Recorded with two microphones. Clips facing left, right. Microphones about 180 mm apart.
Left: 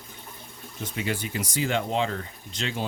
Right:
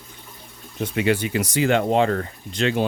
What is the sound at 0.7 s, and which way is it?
Speech, 70° right (ahead or behind).